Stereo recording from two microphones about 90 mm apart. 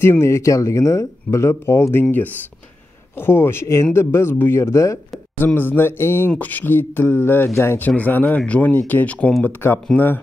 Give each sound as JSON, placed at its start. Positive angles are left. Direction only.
{"t": 0.0, "sound": "speech", "side_deg": 30}
{"t": 5.4, "sound": "speech", "side_deg": 20}